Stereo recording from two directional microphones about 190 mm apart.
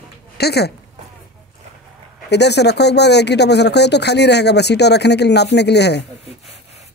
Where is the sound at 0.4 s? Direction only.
60° left (ahead or behind).